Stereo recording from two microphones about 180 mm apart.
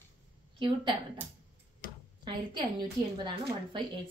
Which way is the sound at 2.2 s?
25° right (ahead or behind).